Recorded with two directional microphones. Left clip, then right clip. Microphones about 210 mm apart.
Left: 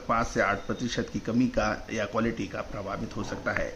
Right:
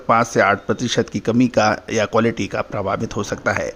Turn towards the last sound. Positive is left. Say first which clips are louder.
# right 10 dB
turn(degrees=-45)  # may be behind; listen again after turning